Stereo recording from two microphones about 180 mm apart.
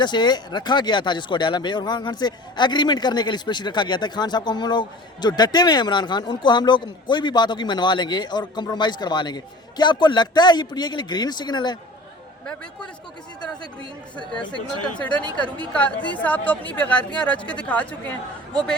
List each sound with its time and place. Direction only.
0.0 s speech: 25° left (ahead or behind)
14.5 s speech: 5° left (ahead or behind)